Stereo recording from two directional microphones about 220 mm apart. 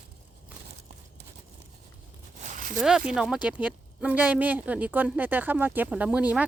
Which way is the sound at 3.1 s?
5° right (ahead or behind).